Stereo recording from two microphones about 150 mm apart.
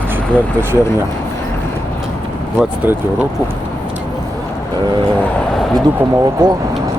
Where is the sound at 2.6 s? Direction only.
10° right (ahead or behind).